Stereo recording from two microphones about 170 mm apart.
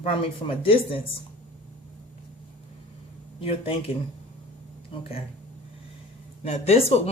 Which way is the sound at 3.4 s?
35° left (ahead or behind).